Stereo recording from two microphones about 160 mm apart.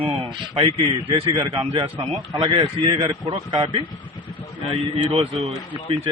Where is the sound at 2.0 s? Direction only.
Centre (ahead or behind).